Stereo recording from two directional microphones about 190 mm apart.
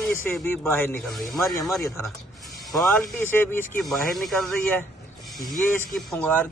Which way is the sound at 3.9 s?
Centre (ahead or behind).